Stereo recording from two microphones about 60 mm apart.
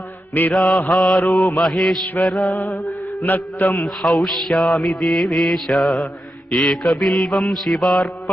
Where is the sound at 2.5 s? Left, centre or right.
Left.